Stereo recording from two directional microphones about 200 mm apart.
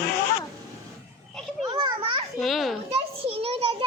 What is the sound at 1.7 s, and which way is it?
Children playing, 20° right (ahead or behind).